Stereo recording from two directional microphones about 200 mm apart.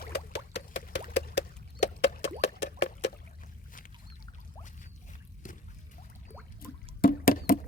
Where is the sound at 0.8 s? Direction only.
40° left (ahead or behind).